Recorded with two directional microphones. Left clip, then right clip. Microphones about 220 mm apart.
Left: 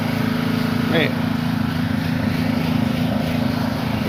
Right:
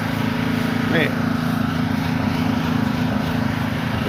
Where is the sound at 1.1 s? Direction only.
30° left (ahead or behind).